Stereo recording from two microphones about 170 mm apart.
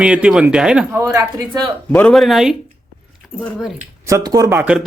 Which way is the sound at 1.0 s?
15° right (ahead or behind).